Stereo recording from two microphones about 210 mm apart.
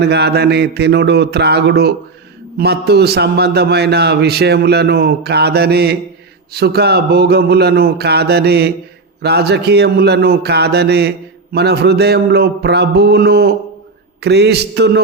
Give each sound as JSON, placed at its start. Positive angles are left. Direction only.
{"t": 0.0, "sound": "a man's voice", "side_deg": -50}